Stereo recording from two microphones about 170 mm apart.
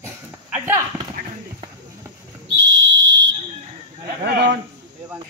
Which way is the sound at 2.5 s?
90° right.